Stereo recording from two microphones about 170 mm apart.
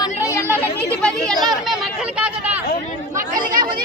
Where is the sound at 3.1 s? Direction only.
50° right (ahead or behind).